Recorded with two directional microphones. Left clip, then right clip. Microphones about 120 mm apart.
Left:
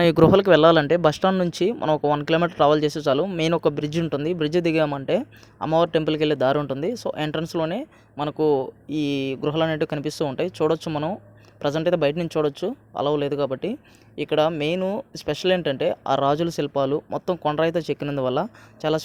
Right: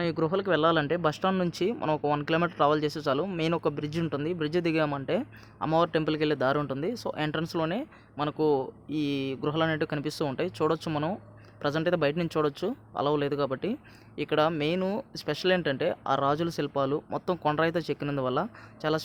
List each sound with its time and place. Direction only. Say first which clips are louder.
0.0 s speech: left 12 dB; 70° left (ahead or behind); by 19.0 s 35° left (ahead or behind)